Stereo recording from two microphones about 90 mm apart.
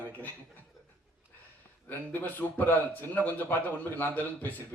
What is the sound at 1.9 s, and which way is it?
A man's voice, 20° left (ahead or behind).